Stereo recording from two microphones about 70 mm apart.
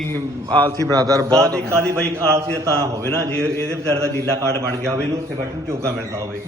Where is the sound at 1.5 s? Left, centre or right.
Right.